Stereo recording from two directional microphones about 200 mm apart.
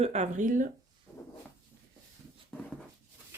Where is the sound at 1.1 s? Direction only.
10° left (ahead or behind).